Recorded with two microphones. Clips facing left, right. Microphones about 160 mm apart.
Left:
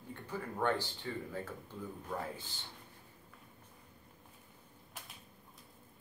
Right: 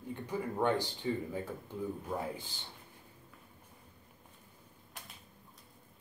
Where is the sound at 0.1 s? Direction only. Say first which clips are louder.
Right 5 dB; 15° right (ahead or behind).